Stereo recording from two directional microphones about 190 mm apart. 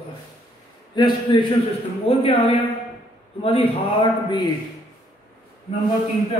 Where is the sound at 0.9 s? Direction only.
25° left (ahead or behind).